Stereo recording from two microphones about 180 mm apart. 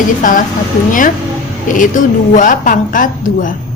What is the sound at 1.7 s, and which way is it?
A woman's voice, 45° left (ahead or behind).